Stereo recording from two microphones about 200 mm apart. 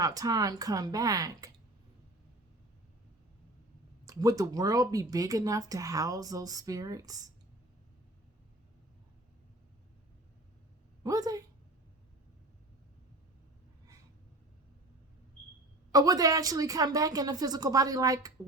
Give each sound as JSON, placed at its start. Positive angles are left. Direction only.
{"t": 0.0, "sound": "speech", "side_deg": -20}
{"t": 4.0, "sound": "speech", "side_deg": -15}
{"t": 11.0, "sound": "a woman's voice", "side_deg": -20}
{"t": 15.9, "sound": "speech", "side_deg": -20}